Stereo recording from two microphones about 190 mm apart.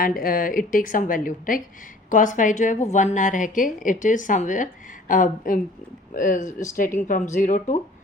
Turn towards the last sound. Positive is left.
turn(degrees=40)  # may be behind; listen again after turning